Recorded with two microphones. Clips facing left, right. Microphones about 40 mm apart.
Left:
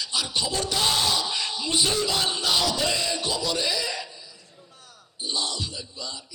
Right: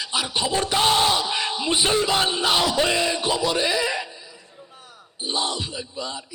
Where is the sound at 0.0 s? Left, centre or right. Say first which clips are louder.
Right 3 dB; right.